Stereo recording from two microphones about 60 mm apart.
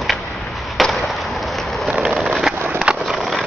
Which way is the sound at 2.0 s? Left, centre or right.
Centre.